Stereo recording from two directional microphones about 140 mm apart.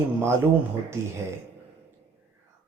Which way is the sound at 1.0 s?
20° right (ahead or behind).